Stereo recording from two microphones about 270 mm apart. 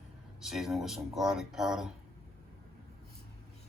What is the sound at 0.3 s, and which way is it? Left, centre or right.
Speech, centre.